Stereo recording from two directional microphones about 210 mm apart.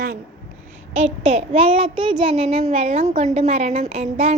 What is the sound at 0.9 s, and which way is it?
A child's voice, 30° right (ahead or behind).